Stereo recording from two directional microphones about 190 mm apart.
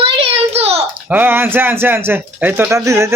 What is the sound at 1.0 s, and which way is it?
Speech, 10° right (ahead or behind).